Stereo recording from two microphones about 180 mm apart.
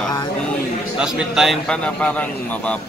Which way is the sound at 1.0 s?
Centre (ahead or behind).